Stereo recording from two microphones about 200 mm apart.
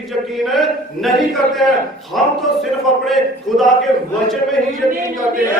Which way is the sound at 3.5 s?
Centre (ahead or behind).